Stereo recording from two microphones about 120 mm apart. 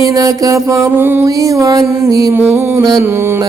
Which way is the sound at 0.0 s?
30° right (ahead or behind).